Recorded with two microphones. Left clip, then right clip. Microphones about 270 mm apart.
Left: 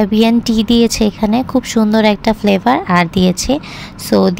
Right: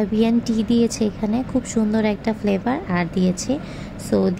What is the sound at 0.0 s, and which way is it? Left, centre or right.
A woman's voice, left.